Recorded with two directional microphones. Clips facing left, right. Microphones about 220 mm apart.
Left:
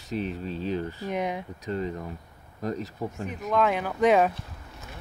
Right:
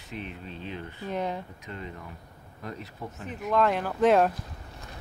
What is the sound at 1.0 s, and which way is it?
Speech, 15° left (ahead or behind).